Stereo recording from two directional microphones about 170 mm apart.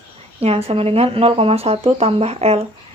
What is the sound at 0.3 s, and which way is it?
Speech, 35° right (ahead or behind).